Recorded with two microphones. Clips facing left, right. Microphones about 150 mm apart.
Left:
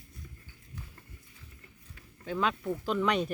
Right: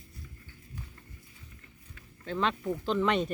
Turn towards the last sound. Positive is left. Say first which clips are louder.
# right 1 dB
turn(degrees=0)  # may be behind; listen again after turning